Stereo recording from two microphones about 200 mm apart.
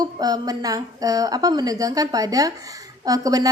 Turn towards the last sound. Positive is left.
turn(degrees=-20)  # may be behind; listen again after turning